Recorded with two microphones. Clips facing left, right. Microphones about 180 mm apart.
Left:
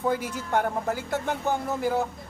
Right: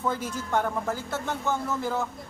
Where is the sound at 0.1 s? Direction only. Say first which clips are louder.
Left 1 dB; 15° left (ahead or behind).